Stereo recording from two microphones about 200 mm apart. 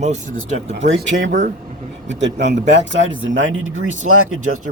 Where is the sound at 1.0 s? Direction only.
65° right (ahead or behind).